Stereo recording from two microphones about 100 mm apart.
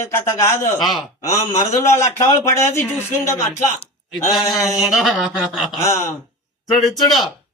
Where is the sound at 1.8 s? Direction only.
25° left (ahead or behind).